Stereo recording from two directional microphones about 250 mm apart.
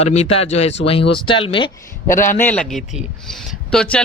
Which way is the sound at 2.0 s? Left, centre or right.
Left.